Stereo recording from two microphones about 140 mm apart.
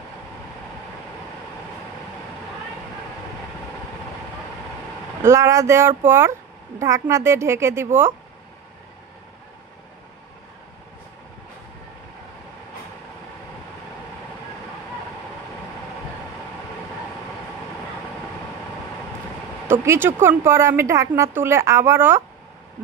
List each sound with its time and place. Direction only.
5.2 s a woman's voice: 20° right (ahead or behind)
19.7 s a woman's voice: 15° right (ahead or behind)